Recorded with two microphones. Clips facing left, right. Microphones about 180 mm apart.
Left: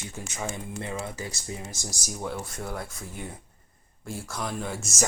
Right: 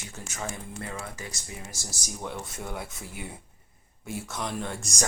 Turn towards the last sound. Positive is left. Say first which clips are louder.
# left 2 dB
turn(degrees=5)  # may be behind; listen again after turning